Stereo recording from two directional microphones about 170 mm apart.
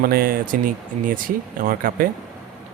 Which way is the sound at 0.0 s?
60° right (ahead or behind).